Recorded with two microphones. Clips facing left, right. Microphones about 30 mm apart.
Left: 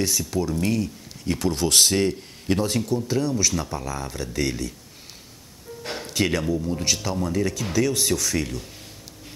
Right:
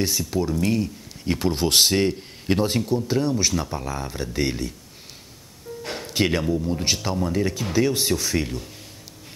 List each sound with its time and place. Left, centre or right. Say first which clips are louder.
0.0 s speech: right 1 dB; centre
5.9 s music: left 1 dB; centre
6.1 s speech: right 1 dB; right